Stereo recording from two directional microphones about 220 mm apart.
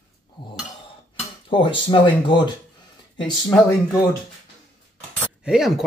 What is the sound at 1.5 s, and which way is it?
Speech, 25° left (ahead or behind).